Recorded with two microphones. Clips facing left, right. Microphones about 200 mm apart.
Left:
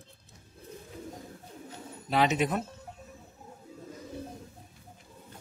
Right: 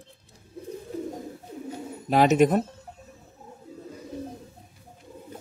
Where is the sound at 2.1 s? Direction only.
45° right (ahead or behind).